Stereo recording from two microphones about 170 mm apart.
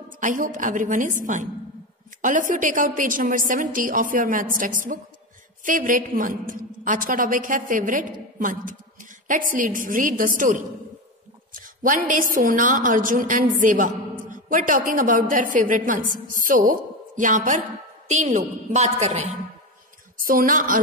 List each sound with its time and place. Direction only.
0.2 s a woman's voice: 50° right (ahead or behind)
11.6 s a woman's voice: 55° right (ahead or behind)
20.2 s a woman's voice: 55° right (ahead or behind)